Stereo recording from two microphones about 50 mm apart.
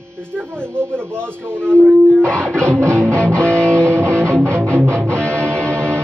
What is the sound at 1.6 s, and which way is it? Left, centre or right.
Speech, left.